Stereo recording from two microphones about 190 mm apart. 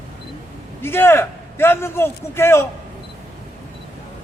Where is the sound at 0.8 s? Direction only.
10° left (ahead or behind).